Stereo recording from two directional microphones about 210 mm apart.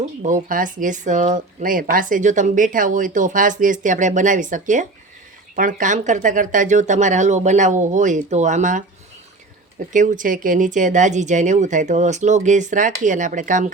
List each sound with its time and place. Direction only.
0.0 s speech: 35° right (ahead or behind)
9.9 s speech: 40° right (ahead or behind)